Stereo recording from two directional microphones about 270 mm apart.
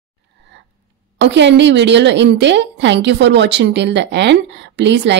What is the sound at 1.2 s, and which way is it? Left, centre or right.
A woman's voice, right.